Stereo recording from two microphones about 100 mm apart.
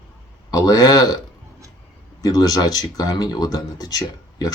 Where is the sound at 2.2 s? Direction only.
40° left (ahead or behind).